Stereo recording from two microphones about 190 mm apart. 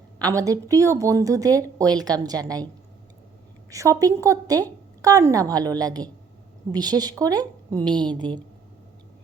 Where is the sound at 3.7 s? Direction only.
15° right (ahead or behind).